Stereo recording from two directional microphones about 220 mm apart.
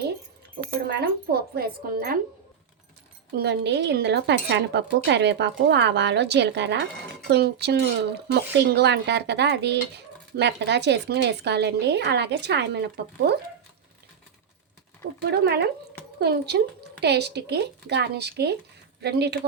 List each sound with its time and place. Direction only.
0.9 s a woman's voice: 45° right (ahead or behind)
3.3 s a woman's voice: 50° right (ahead or behind)
15.3 s a woman's voice: 45° right (ahead or behind)